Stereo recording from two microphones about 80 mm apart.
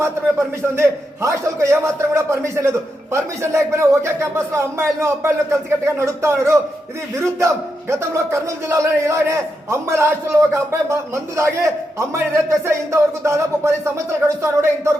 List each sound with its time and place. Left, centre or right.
0.0 s a man's voice: right